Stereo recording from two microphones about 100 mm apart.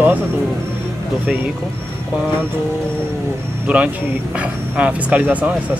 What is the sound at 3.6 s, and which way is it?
Speech, 15° right (ahead or behind).